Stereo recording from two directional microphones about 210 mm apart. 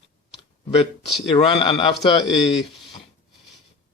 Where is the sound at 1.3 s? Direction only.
25° left (ahead or behind).